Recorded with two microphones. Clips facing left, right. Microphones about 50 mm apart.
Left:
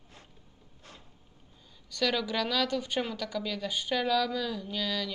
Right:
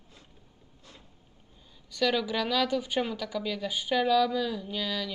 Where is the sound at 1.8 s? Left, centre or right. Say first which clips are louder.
Right 2 dB; centre.